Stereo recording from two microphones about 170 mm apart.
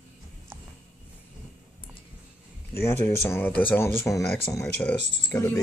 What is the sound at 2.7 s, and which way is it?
Speech, 15° left (ahead or behind).